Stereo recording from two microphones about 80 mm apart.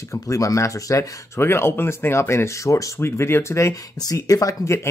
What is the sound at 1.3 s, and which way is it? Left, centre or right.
Speech, left.